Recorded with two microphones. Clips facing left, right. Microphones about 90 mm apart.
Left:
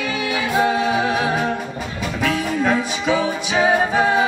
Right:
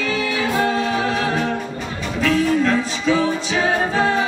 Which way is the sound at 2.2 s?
15° left (ahead or behind).